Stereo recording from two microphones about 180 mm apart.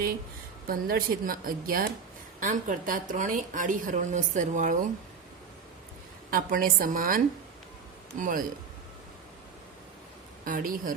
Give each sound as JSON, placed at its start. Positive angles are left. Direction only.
{"t": 0.7, "sound": "a woman's voice", "side_deg": -55}
{"t": 6.3, "sound": "a woman's voice", "side_deg": -55}
{"t": 8.2, "sound": "a woman's voice", "side_deg": -50}
{"t": 10.4, "sound": "a woman's voice", "side_deg": -50}